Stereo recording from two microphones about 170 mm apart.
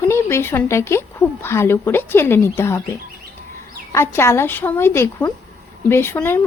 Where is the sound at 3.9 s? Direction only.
15° left (ahead or behind).